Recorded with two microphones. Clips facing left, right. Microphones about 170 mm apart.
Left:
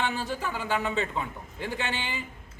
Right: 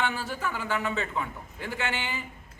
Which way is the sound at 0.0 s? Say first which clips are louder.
Even; 20° left (ahead or behind).